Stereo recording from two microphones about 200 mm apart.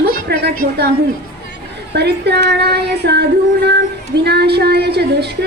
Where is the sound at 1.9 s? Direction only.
55° right (ahead or behind).